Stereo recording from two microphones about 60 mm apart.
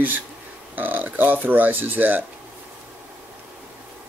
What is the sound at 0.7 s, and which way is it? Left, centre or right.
Speech, right.